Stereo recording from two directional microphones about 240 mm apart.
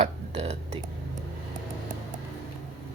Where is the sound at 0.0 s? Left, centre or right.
Right.